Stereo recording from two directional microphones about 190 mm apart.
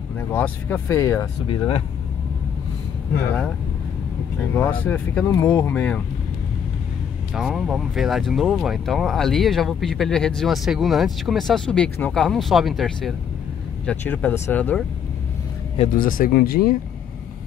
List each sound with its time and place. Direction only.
0.3 s speech: 10° left (ahead or behind)
4.6 s speech: 10° left (ahead or behind)
7.3 s speech: centre (ahead or behind)
15.8 s speech: 45° left (ahead or behind)